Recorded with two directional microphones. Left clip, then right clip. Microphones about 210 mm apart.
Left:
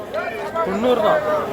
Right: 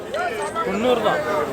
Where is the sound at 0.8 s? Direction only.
20° left (ahead or behind).